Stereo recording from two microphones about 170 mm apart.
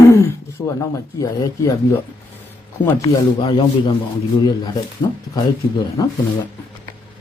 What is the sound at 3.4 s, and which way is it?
Speech, 30° left (ahead or behind).